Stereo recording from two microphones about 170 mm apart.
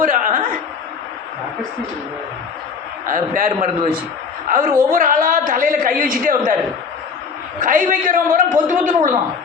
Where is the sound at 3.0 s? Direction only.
55° right (ahead or behind).